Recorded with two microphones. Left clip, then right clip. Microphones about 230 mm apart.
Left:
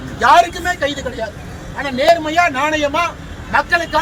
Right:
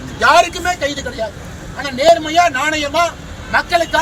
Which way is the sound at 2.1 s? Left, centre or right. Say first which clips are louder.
Right 2 dB; centre.